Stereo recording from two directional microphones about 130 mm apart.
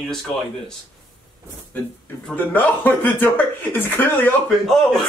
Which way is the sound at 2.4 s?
15° left (ahead or behind).